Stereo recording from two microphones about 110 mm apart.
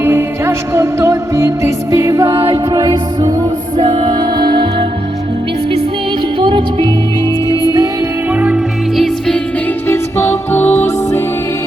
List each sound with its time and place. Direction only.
0.0 s music: 20° right (ahead or behind)
2.6 s music: 35° right (ahead or behind)
3.8 s music: 50° right (ahead or behind)
6.4 s music: 50° right (ahead or behind)
7.4 s music: 35° right (ahead or behind)
8.3 s music: 15° right (ahead or behind)
9.0 s music: 5° left (ahead or behind)
9.8 s music: 20° left (ahead or behind)